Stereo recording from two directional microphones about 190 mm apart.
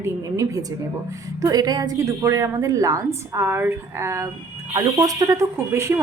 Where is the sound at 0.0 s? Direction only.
15° right (ahead or behind).